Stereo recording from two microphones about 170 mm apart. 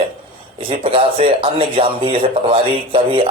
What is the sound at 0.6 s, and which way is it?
Speech, 30° right (ahead or behind).